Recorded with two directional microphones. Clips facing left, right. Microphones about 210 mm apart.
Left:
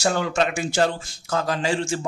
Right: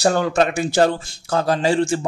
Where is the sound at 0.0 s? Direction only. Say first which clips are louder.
Right 5 dB; 40° right (ahead or behind).